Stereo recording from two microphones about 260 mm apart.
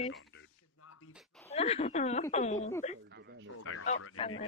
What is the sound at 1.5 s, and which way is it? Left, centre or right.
Speech, left.